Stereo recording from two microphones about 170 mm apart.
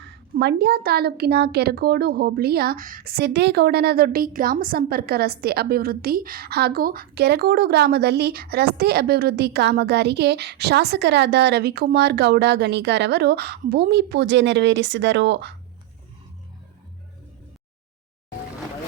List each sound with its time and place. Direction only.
0.0 s a woman's voice: 90° right